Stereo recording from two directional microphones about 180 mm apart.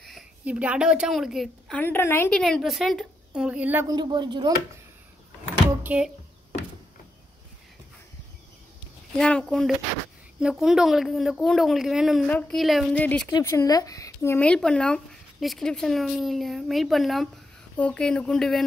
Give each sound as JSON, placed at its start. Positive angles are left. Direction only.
{"t": 0.0, "sound": "a woman's voice", "side_deg": -5}
{"t": 1.8, "sound": "speech", "side_deg": 10}
{"t": 2.4, "sound": "speech", "side_deg": 0}
{"t": 3.9, "sound": "speech", "side_deg": -25}
{"t": 5.7, "sound": "a sound", "side_deg": -10}
{"t": 9.2, "sound": "speech", "side_deg": 5}